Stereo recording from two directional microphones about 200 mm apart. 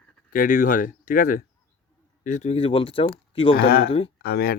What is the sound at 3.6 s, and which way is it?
Speech, 50° left (ahead or behind).